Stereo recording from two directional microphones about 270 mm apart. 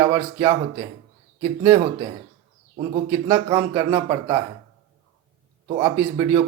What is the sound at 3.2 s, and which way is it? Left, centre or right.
Speech, centre.